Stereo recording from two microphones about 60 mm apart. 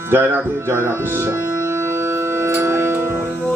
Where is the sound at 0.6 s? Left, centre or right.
Right.